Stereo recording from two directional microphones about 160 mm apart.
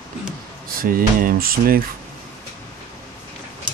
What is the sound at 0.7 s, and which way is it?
Speech, 65° right (ahead or behind).